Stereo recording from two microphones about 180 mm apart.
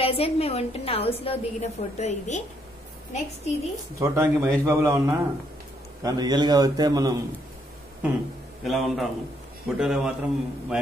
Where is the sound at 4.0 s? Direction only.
15° right (ahead or behind).